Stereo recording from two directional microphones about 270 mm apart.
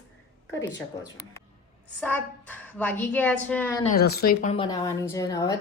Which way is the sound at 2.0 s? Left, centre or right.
Centre.